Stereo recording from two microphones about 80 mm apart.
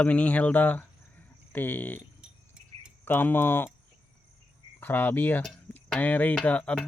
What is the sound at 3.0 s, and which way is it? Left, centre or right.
Speech, left.